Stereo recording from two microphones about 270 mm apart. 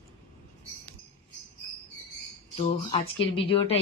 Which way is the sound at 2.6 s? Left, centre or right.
Left.